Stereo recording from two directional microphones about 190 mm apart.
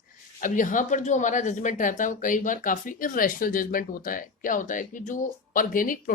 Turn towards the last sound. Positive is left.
turn(degrees=45)  # may be behind; listen again after turning